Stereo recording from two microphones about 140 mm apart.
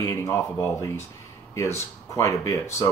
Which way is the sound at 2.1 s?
20° left (ahead or behind).